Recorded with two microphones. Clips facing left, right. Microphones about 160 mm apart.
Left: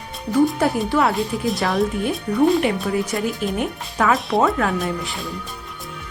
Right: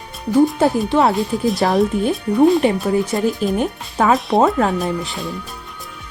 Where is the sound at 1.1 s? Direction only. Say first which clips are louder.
Right 3 dB; centre (ahead or behind).